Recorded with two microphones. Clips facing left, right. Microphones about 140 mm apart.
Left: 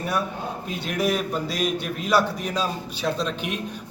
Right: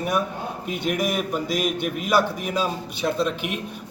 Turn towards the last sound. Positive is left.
turn(degrees=-10)  # may be behind; listen again after turning